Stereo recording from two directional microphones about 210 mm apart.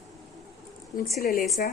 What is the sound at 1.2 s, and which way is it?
Speech, 45° left (ahead or behind).